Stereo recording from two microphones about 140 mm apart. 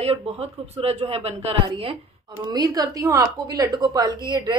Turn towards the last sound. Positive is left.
turn(degrees=-35)  # may be behind; listen again after turning